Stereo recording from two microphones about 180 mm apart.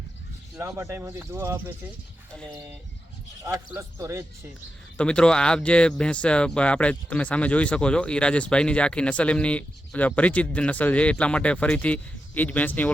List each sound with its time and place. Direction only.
0.6 s speech: 15° right (ahead or behind)
3.4 s speech: 15° right (ahead or behind)
4.9 s speech: 5° left (ahead or behind)